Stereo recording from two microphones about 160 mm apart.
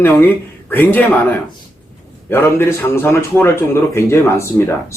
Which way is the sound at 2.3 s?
15° left (ahead or behind).